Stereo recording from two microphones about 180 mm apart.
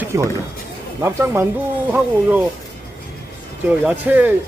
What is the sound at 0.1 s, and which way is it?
Speech, 15° right (ahead or behind).